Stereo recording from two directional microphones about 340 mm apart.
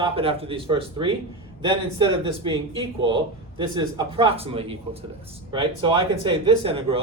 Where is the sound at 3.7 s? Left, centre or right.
Centre.